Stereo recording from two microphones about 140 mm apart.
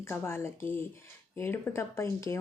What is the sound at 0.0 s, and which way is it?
A woman's voice, 15° left (ahead or behind).